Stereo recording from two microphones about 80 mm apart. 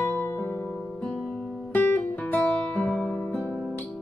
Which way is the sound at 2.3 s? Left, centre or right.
Centre.